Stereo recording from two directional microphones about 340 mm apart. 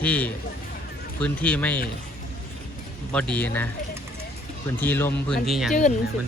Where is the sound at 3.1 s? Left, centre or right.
Centre.